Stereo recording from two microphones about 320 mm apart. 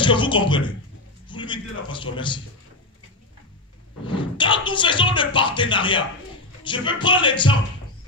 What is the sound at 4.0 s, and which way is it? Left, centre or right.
Speech, centre.